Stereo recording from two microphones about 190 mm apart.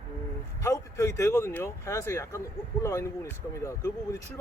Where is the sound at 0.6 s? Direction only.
15° left (ahead or behind).